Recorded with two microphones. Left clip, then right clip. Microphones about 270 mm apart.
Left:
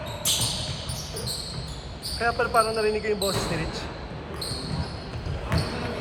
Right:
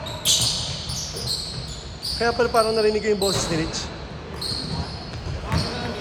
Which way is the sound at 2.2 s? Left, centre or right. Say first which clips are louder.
Right 3 dB; right.